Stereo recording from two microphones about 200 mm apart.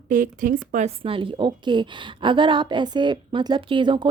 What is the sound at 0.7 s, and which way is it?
A woman's voice, 30° right (ahead or behind).